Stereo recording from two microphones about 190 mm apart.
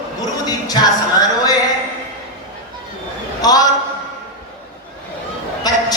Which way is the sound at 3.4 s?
20° left (ahead or behind).